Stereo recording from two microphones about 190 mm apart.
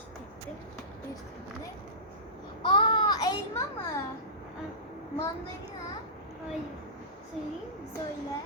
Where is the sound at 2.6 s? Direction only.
25° left (ahead or behind).